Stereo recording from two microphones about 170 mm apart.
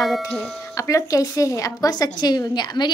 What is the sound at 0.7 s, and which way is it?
A woman's voice, 20° left (ahead or behind).